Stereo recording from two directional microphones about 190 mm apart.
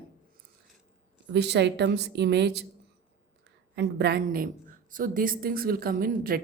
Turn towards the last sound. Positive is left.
turn(degrees=-50)  # may be behind; listen again after turning